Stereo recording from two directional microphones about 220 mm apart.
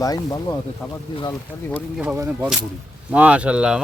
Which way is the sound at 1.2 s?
10° left (ahead or behind).